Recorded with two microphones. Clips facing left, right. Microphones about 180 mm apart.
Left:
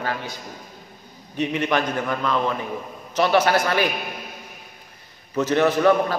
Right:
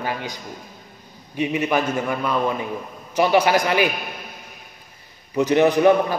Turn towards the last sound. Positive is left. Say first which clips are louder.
# right 2 dB
turn(degrees=-15)  # may be behind; listen again after turning